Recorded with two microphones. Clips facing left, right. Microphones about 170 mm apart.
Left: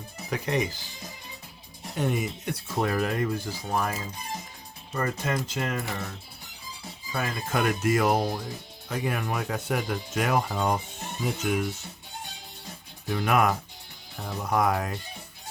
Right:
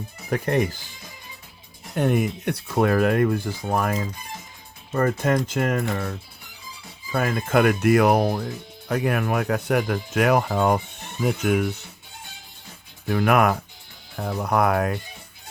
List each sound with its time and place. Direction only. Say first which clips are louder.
0.3 s speech: right 5 dB; 50° right (ahead or behind)
2.0 s speech: right 6 dB; 60° right (ahead or behind)
4.9 s speech: right 8 dB; 55° right (ahead or behind)
13.1 s speech: right 5 dB; 60° right (ahead or behind)